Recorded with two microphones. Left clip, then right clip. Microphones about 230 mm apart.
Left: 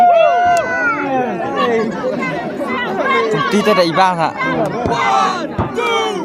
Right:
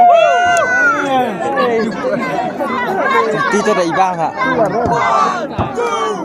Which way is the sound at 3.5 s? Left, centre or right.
Left.